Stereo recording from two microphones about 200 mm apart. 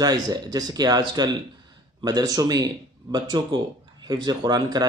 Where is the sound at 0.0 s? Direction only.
20° right (ahead or behind).